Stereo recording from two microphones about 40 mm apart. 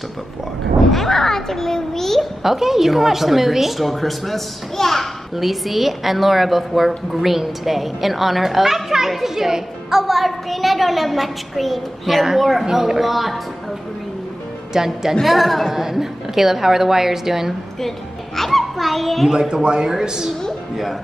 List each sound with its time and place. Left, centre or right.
0.9 s a child's voice: centre
2.4 s a woman's voice: centre
14.7 s a woman's voice: centre
15.2 s a woman's voice: centre
17.7 s a child's voice: centre
19.2 s a woman's voice: centre